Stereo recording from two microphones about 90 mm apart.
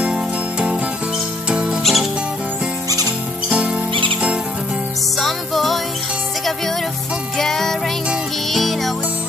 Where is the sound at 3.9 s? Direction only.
75° right (ahead or behind).